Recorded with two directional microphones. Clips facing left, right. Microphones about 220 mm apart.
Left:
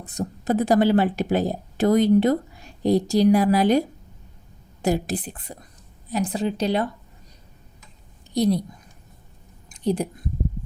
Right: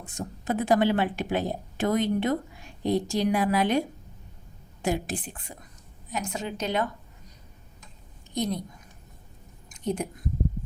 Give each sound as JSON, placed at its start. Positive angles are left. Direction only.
{"t": 0.0, "sound": "a woman's voice", "side_deg": 40}
{"t": 8.3, "sound": "a woman's voice", "side_deg": 35}
{"t": 9.6, "sound": "a sound", "side_deg": 35}